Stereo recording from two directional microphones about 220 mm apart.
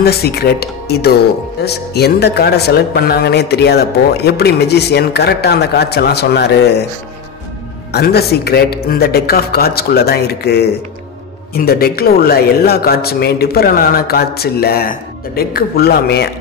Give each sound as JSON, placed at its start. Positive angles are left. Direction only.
{"t": 0.0, "sound": "speech", "side_deg": 45}
{"t": 7.9, "sound": "speech", "side_deg": 45}